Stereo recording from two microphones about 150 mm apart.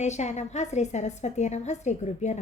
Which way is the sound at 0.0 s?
50° left (ahead or behind).